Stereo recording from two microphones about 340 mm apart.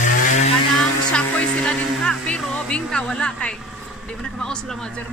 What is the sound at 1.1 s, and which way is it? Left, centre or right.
Speech, centre.